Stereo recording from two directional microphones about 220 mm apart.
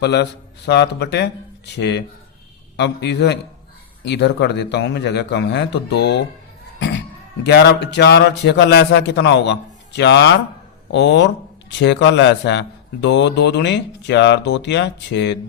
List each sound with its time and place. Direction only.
0.0 s speech: 50° left (ahead or behind)
6.7 s a sound: 55° left (ahead or behind)
7.4 s speech: 50° left (ahead or behind)